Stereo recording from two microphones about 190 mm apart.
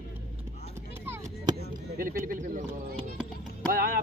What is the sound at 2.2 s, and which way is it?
Speech, 45° right (ahead or behind).